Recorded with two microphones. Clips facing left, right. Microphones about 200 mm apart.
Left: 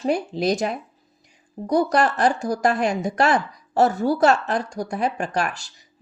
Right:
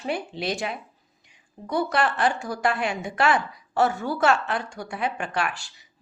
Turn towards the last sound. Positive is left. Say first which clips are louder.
# left 3 dB
turn(degrees=40)  # may be behind; listen again after turning